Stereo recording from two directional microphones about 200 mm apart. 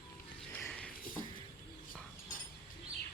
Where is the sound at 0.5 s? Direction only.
10° left (ahead or behind).